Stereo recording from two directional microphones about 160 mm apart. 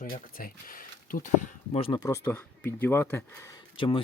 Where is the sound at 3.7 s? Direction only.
35° left (ahead or behind).